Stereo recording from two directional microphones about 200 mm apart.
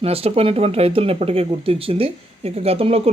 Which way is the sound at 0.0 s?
30° right (ahead or behind).